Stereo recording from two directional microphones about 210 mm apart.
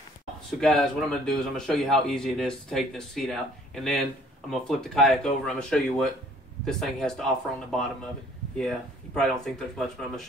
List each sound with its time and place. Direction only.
0.6 s a man's voice: centre (ahead or behind)
8.5 s a man's voice: 5° left (ahead or behind)